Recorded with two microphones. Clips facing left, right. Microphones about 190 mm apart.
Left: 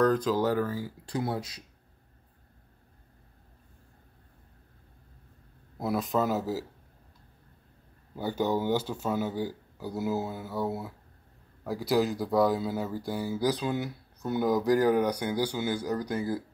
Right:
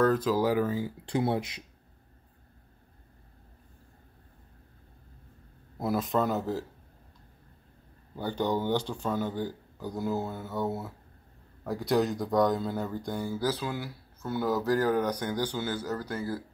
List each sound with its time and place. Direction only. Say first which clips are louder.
0.0 s speech: even; 5° right (ahead or behind)
0.7 s speech: right 3 dB; 25° right (ahead or behind)
5.8 s speech: even; centre (ahead or behind)
8.2 s speech: left 1 dB; 5° left (ahead or behind)